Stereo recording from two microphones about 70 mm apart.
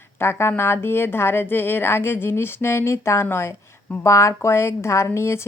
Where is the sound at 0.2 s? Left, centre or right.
Left.